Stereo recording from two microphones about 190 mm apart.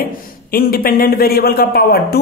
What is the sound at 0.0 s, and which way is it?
A man's voice, 50° left (ahead or behind).